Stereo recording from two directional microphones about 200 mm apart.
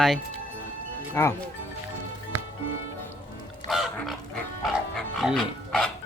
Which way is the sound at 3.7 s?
Centre (ahead or behind).